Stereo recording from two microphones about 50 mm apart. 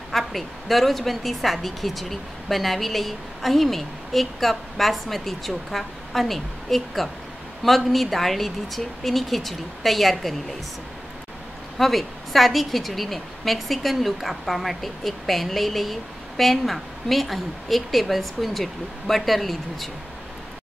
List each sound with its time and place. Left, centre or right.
0.1 s a woman's voice: centre
11.8 s a woman's voice: centre